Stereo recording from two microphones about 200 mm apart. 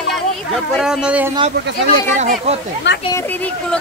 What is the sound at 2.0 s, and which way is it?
Speech, 35° right (ahead or behind).